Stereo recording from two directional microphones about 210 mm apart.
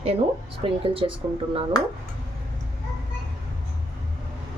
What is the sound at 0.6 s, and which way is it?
Speech, 25° right (ahead or behind).